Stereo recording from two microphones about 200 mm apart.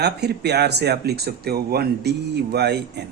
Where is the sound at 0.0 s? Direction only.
55° right (ahead or behind).